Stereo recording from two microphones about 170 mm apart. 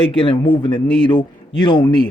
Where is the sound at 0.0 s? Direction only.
30° left (ahead or behind).